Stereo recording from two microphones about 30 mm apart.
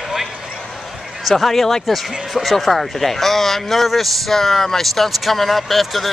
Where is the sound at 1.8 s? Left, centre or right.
Centre.